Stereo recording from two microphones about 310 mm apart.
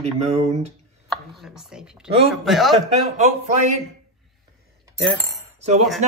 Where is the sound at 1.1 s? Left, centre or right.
Centre.